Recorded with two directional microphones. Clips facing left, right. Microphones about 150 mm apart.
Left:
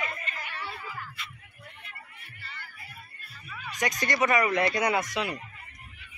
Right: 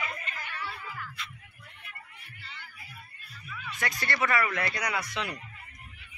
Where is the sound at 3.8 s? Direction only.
20° left (ahead or behind).